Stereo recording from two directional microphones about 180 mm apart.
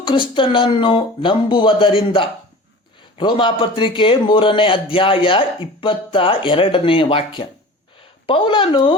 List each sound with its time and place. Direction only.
0.0 s a man's voice: 30° left (ahead or behind)